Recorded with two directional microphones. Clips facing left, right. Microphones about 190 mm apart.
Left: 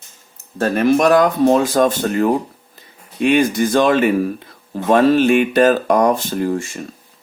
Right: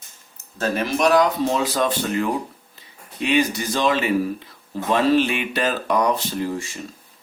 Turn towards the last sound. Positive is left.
turn(degrees=50)  # may be behind; listen again after turning